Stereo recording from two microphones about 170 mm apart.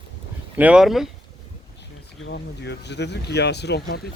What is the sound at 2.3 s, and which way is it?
Speech, 85° left.